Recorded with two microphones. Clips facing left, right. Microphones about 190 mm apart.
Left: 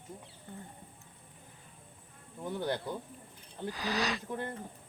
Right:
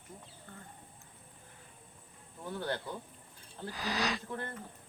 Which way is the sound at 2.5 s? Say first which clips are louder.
Left 3 dB; 15° left (ahead or behind).